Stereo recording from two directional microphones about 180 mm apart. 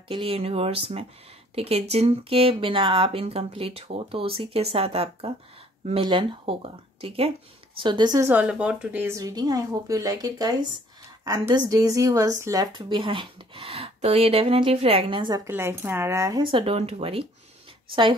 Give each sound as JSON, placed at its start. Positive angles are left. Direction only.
{"t": 0.1, "sound": "a woman's voice", "side_deg": -30}
{"t": 8.3, "sound": "a woman's voice", "side_deg": -5}